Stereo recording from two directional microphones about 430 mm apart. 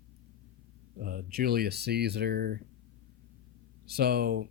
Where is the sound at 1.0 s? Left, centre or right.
Centre.